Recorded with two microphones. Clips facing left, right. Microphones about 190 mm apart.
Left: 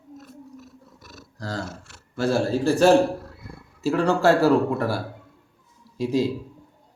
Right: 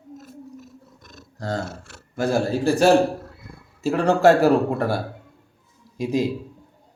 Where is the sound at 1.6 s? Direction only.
65° right (ahead or behind).